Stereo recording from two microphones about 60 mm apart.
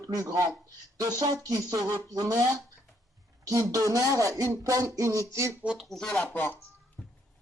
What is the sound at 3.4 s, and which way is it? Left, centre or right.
Speech, right.